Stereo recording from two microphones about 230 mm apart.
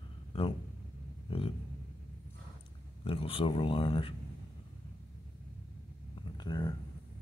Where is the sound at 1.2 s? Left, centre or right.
Left.